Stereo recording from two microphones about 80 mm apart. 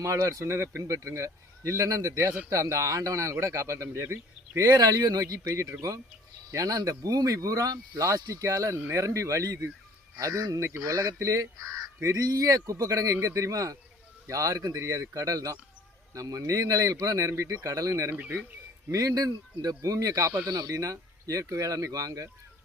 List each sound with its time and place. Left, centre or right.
0.0 s speech: right
18.1 s speech: right
18.9 s speech: right
20.4 s speech: right
20.7 s speech: right